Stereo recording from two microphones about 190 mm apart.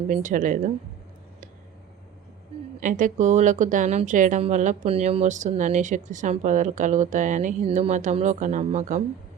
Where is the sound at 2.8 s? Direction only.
40° right (ahead or behind).